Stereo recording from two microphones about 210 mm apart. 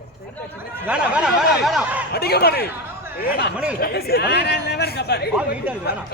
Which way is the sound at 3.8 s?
45° left (ahead or behind).